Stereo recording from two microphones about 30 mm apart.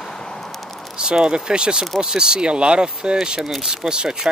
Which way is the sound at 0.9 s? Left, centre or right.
Right.